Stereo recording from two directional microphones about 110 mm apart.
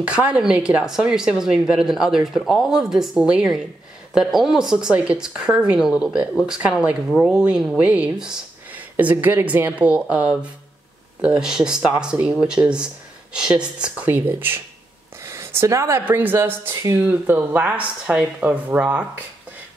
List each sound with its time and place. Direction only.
0.0 s speech: 10° right (ahead or behind)
15.2 s a sound: 25° right (ahead or behind)
16.1 s speech: 15° right (ahead or behind)